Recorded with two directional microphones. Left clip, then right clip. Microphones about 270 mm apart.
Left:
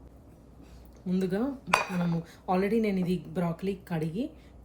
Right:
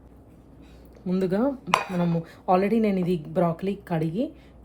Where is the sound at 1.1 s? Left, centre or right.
Right.